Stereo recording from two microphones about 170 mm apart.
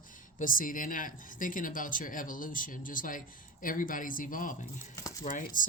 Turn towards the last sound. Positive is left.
turn(degrees=50)  # may be behind; listen again after turning